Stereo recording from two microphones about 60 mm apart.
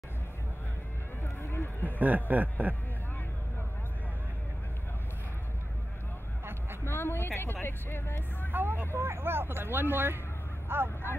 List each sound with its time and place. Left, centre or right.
1.2 s run: left
2.0 s a man's voice: right
6.8 s a sound: left
7.6 s speech: left
8.5 s speech: right